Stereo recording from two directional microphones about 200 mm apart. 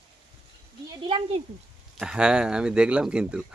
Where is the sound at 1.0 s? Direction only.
25° right (ahead or behind).